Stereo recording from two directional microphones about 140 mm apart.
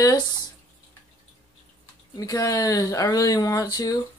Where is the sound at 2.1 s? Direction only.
25° left (ahead or behind).